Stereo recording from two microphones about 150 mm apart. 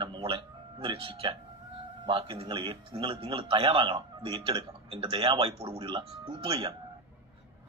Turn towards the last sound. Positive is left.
turn(degrees=-30)  # may be behind; listen again after turning